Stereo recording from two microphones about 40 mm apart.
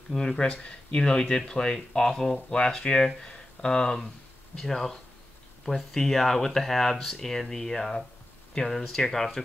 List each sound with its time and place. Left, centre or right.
0.4 s speech: left; by 9.4 s centre